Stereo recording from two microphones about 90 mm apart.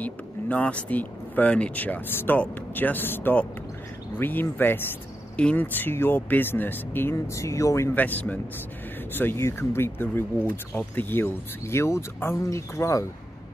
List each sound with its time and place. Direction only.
0.0 s speech: 15° left (ahead or behind)
7.3 s speech: 35° left (ahead or behind)
7.9 s speech: 20° left (ahead or behind); by 13.0 s 35° left (ahead or behind)